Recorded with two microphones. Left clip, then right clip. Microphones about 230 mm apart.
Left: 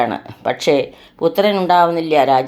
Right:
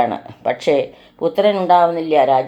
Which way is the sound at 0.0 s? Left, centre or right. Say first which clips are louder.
Even; left.